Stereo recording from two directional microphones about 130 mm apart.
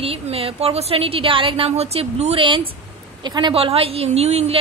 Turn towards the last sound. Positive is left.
turn(degrees=-55)  # may be behind; listen again after turning